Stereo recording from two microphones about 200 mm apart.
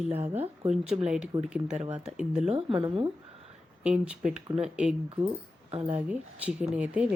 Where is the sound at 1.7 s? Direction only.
35° right (ahead or behind).